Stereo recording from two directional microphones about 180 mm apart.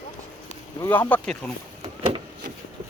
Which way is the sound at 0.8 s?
10° left (ahead or behind).